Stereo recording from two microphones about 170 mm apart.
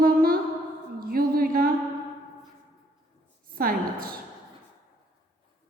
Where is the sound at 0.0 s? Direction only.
60° right (ahead or behind).